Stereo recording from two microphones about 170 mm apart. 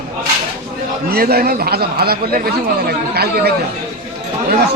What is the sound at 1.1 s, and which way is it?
A man's voice, 65° right (ahead or behind).